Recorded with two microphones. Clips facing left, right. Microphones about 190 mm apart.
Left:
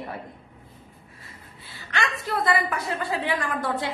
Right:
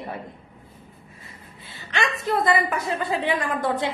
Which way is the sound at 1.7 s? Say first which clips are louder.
Right 2 dB; 20° right (ahead or behind).